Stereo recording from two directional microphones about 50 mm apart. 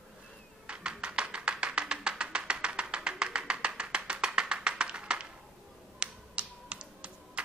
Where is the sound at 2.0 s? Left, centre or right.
Centre.